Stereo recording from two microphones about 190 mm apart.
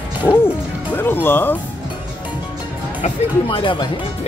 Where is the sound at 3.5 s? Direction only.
25° left (ahead or behind).